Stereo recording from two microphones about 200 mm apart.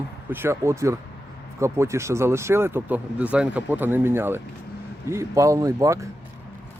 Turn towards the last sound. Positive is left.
turn(degrees=-15)  # may be behind; listen again after turning